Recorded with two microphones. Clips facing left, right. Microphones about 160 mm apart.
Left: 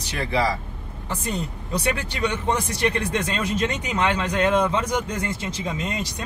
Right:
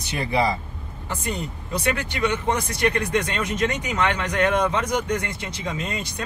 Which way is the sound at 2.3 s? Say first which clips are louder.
Even; 30° left (ahead or behind).